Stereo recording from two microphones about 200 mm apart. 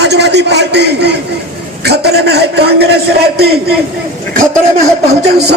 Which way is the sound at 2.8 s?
55° right (ahead or behind).